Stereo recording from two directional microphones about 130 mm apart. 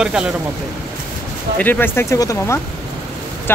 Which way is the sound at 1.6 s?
15° left (ahead or behind).